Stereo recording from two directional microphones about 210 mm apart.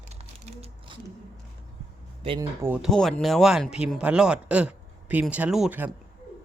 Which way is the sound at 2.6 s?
10° right (ahead or behind).